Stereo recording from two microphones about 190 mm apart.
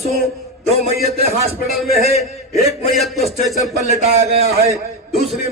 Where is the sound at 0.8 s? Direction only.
35° left (ahead or behind).